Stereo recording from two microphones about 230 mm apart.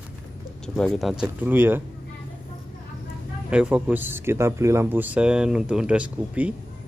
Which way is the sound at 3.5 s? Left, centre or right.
Centre.